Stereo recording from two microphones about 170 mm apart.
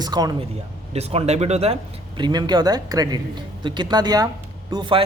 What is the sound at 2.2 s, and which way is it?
A man's voice, 25° right (ahead or behind).